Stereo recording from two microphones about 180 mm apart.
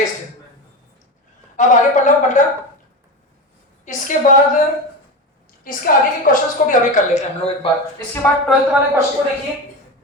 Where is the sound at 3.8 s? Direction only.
45° left (ahead or behind).